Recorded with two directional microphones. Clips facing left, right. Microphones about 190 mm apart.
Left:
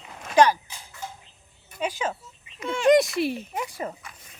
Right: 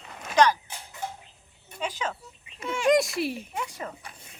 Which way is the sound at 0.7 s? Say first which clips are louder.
Right 3 dB; 60° right (ahead or behind).